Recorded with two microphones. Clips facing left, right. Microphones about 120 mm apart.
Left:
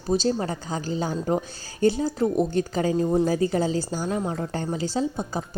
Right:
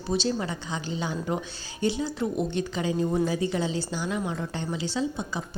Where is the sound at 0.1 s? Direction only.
40° left (ahead or behind).